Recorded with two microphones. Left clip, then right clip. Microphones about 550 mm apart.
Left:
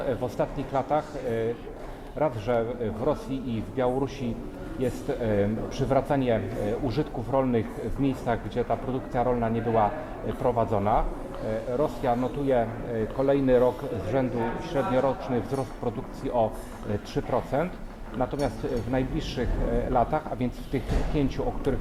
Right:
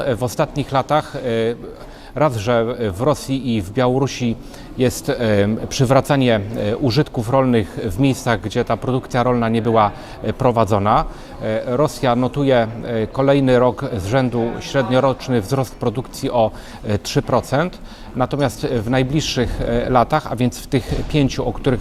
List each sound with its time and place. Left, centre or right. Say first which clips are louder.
0.0 s speech: right 8 dB; right